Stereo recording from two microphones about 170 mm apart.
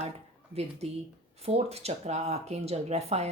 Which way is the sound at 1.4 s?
35° right (ahead or behind).